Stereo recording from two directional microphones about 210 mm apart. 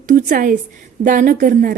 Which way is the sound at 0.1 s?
40° right (ahead or behind).